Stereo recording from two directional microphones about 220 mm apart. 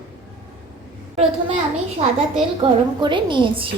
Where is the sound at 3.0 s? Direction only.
20° right (ahead or behind).